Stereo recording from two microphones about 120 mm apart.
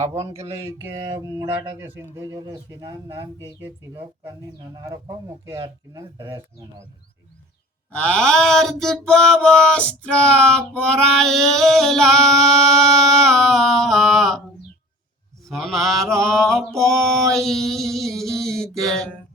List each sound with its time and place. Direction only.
0.2 s speech: 30° right (ahead or behind)
1.0 s mantra: 30° right (ahead or behind)
1.5 s speech: 15° right (ahead or behind)
2.3 s speech: 30° right (ahead or behind)
4.3 s speech: 30° right (ahead or behind)
7.9 s a sound: 5° left (ahead or behind)
15.4 s a sound: centre (ahead or behind)
16.9 s speech: 25° right (ahead or behind)
17.2 s a sound: 5° left (ahead or behind)